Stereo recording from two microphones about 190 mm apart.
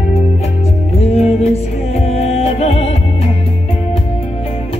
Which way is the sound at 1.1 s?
35° left (ahead or behind).